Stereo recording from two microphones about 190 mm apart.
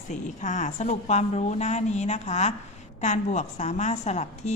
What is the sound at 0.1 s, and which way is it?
Speech, 40° left (ahead or behind).